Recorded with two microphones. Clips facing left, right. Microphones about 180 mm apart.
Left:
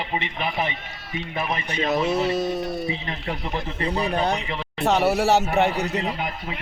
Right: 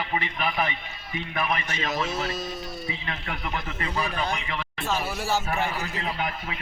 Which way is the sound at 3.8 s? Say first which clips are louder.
Left 6 dB; 35° left (ahead or behind).